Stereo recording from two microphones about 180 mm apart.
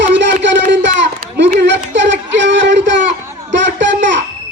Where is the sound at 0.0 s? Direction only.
85° right.